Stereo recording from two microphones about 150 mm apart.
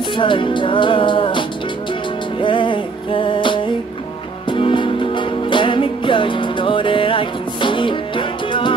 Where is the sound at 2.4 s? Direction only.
35° left (ahead or behind).